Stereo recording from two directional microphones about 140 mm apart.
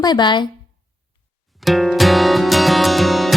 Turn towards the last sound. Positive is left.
turn(degrees=0)  # may be behind; listen again after turning